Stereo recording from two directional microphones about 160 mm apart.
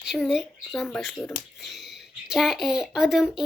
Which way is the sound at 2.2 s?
Centre (ahead or behind).